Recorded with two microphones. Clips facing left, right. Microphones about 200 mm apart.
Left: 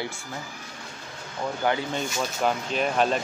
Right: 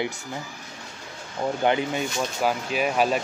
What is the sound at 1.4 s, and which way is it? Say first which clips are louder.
Speech: right 4 dB; 20° right (ahead or behind).